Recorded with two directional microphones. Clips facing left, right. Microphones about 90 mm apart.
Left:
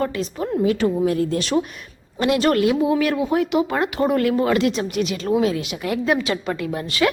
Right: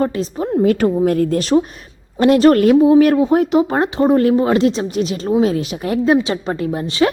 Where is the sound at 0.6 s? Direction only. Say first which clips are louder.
Right 5 dB; 50° right (ahead or behind).